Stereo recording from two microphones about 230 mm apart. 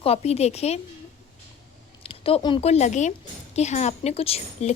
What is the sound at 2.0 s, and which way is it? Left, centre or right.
A woman's voice, left.